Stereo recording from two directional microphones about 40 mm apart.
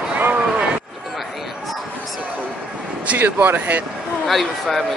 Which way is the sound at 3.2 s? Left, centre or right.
Right.